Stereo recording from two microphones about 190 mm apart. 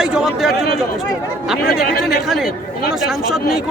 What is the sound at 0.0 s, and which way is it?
Chatter, 5° right (ahead or behind).